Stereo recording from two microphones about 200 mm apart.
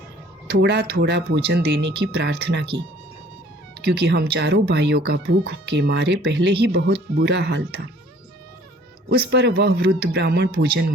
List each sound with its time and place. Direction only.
0.5 s speech: 60° right (ahead or behind)
3.8 s speech: 55° right (ahead or behind)
9.0 s speech: 55° right (ahead or behind)